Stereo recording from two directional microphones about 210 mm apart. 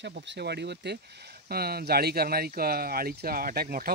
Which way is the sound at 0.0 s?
55° right (ahead or behind).